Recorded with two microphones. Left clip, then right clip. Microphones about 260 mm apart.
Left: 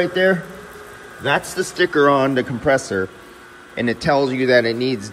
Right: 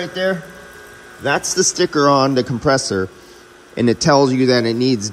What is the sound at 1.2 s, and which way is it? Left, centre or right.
A man's voice, right.